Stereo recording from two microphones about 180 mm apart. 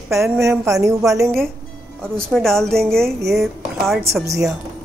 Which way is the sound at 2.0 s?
5° left (ahead or behind).